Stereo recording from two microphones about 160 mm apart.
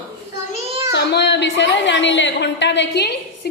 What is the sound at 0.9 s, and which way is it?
A woman's voice, 90° left.